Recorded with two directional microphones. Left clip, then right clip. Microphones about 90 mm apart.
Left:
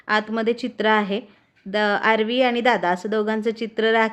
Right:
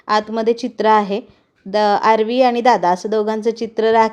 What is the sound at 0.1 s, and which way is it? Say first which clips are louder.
A woman's voice: right 5 dB; 20° right (ahead or behind).